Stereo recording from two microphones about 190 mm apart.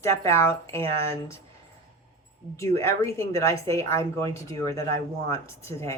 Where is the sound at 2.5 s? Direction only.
15° left (ahead or behind).